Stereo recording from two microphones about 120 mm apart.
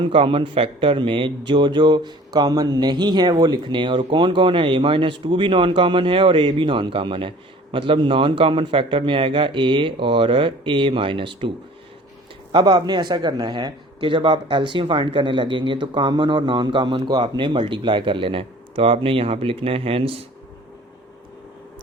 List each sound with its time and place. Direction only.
0.0 s a man's voice: 45° right (ahead or behind)